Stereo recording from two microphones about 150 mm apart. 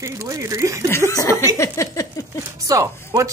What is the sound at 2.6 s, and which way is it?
Speech, 20° right (ahead or behind).